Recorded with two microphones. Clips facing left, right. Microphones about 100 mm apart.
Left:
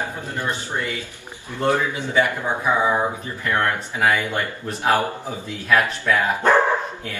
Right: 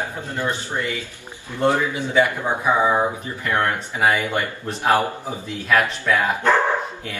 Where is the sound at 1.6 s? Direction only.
20° right (ahead or behind).